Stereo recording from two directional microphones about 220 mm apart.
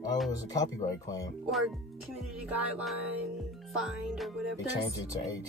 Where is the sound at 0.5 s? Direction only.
15° left (ahead or behind).